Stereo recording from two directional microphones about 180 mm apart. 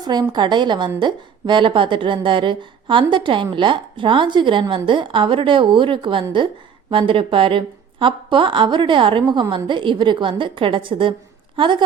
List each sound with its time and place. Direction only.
0.0 s a woman's voice: 25° right (ahead or behind)